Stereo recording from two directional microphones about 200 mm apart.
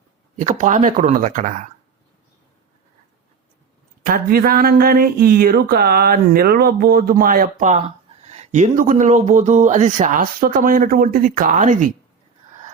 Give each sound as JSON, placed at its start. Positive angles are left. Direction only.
{"t": 0.3, "sound": "speech", "side_deg": -40}
{"t": 4.0, "sound": "speech", "side_deg": -45}